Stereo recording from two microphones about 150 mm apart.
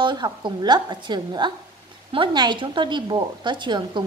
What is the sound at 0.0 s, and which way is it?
A woman's voice, 30° right (ahead or behind).